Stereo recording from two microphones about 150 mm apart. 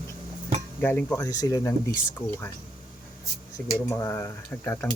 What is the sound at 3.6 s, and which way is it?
Speech, 10° left (ahead or behind).